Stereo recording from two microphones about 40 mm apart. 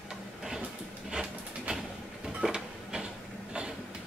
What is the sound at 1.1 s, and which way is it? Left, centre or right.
Printer, centre.